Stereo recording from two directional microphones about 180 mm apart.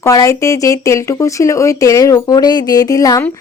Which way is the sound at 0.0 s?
20° left (ahead or behind).